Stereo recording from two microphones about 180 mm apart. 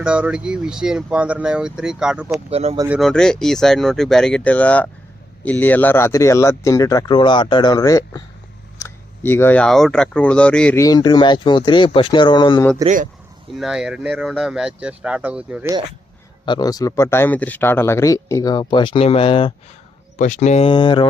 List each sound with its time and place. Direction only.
0.0 s speech: 5° right (ahead or behind)
2.5 s speech: 35° right (ahead or behind)
2.9 s speech: centre (ahead or behind)
10.8 s speech: 20° left (ahead or behind)
12.8 s speech: 45° right (ahead or behind)
13.5 s speech: centre (ahead or behind)
16.5 s speech: 20° left (ahead or behind)
20.1 s speech: 45° left (ahead or behind); by 21.1 s 25° left (ahead or behind)